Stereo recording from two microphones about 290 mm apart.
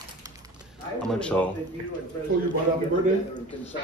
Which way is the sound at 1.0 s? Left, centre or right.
Centre.